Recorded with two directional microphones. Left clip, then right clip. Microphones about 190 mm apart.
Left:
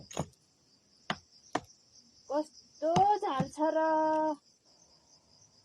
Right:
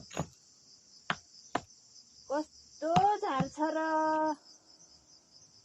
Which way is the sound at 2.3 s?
10° left (ahead or behind).